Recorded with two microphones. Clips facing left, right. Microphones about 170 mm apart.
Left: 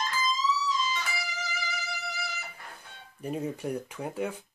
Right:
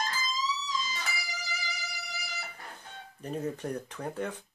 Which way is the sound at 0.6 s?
40° right (ahead or behind).